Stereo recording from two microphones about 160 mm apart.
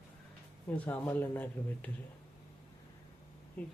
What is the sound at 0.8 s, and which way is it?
Speech, 10° left (ahead or behind).